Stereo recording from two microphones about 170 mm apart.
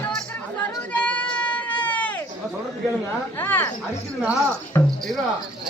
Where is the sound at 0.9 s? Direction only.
10° left (ahead or behind).